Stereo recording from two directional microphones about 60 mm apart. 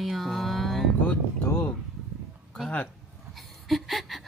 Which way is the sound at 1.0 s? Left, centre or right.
Left.